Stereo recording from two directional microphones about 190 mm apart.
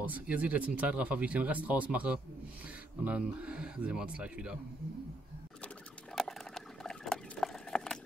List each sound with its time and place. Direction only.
0.0 s speech: 10° right (ahead or behind)
6.1 s patter: centre (ahead or behind)